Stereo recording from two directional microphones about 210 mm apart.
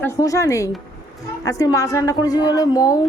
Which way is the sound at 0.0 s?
15° left (ahead or behind).